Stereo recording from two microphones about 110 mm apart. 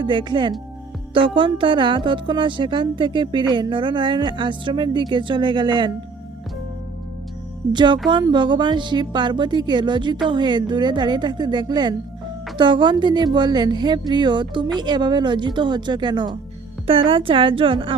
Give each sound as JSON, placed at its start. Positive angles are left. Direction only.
{"t": 0.0, "sound": "speech", "side_deg": -45}
{"t": 7.7, "sound": "speech", "side_deg": -45}